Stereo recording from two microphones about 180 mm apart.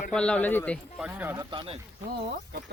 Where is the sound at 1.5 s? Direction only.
25° right (ahead or behind).